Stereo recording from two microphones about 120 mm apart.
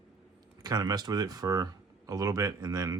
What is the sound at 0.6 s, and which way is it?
Speech, 30° right (ahead or behind).